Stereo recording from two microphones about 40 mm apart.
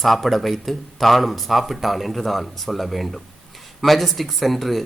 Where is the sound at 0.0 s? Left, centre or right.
Centre.